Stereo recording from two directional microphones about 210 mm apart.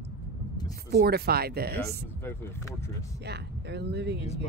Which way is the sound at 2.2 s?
10° left (ahead or behind).